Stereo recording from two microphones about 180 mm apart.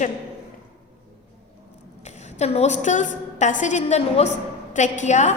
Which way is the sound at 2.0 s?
40° left (ahead or behind).